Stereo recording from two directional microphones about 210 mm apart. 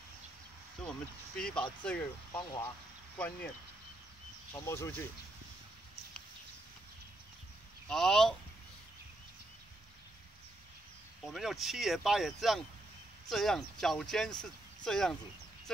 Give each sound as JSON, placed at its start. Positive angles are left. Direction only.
{"t": 0.8, "sound": "speech", "side_deg": 5}
{"t": 7.9, "sound": "speech", "side_deg": 0}
{"t": 11.2, "sound": "speech", "side_deg": 0}